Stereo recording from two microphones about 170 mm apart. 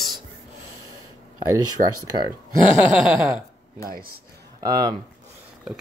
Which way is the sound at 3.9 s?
60° right (ahead or behind).